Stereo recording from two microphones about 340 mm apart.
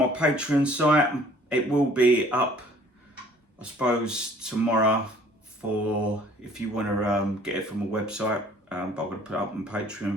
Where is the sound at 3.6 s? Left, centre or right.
Centre.